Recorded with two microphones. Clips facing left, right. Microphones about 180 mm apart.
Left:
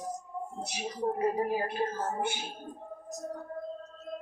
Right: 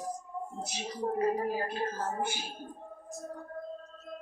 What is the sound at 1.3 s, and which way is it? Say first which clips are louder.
Speech: left 2 dB; 15° left (ahead or behind).